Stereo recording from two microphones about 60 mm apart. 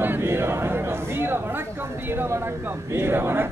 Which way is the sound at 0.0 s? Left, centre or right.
Right.